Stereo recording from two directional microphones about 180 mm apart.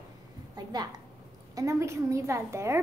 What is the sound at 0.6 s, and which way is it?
A woman's voice, 20° right (ahead or behind).